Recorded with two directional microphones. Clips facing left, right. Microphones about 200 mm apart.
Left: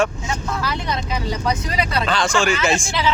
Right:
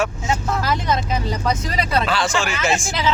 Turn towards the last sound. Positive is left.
turn(degrees=-45)  # may be behind; listen again after turning